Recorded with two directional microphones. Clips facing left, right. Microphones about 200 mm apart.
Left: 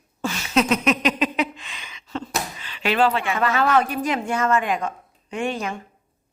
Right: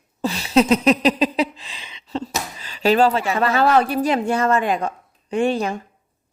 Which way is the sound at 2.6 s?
40° right (ahead or behind).